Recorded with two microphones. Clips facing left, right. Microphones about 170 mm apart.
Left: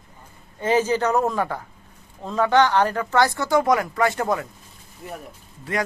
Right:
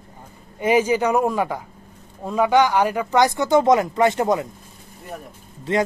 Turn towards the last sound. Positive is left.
turn(degrees=-25)  # may be behind; listen again after turning